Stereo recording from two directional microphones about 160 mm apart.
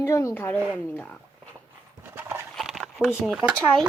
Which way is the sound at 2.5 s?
Centre (ahead or behind).